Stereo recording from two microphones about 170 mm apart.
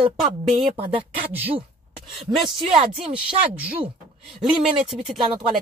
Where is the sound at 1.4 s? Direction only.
35° right (ahead or behind).